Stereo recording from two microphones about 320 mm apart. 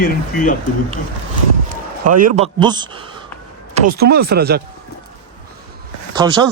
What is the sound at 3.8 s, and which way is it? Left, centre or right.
Speech, right.